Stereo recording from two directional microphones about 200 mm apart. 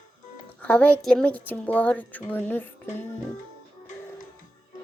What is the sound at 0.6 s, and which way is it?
A woman's voice, 5° left (ahead or behind).